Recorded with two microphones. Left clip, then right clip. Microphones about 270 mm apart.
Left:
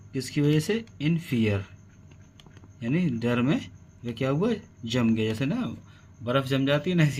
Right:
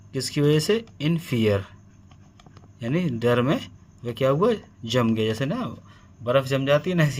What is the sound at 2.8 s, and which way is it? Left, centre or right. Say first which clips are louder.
Speech: right 3 dB; right.